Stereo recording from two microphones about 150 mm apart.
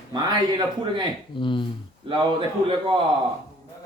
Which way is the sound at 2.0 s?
35° right (ahead or behind).